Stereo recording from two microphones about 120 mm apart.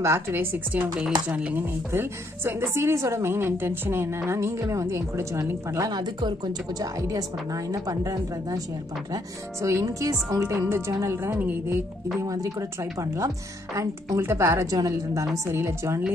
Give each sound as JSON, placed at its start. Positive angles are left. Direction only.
{"t": 0.0, "sound": "a woman's voice", "side_deg": -20}
{"t": 5.9, "sound": "a woman's voice", "side_deg": -35}
{"t": 12.3, "sound": "a woman's voice", "side_deg": -30}